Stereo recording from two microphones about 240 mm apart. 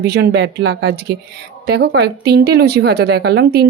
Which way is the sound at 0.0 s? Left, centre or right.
Right.